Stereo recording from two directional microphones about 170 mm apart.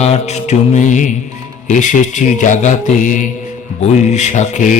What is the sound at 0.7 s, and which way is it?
Speech, 45° left (ahead or behind).